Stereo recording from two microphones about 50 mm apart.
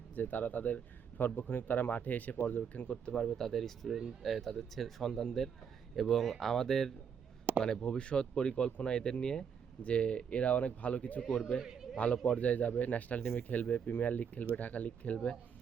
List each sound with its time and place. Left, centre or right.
0.2 s speech: left
2.8 s speech: centre
11.3 s speech: centre
11.6 s a man's voice: centre
11.9 s speech: left